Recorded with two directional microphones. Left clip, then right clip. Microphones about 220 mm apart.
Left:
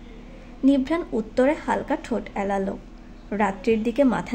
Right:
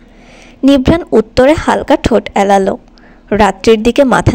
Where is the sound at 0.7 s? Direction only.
45° right (ahead or behind).